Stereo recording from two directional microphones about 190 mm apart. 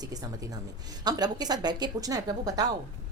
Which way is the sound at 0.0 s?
20° right (ahead or behind).